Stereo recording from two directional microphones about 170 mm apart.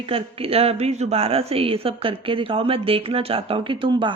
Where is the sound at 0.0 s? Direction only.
35° right (ahead or behind).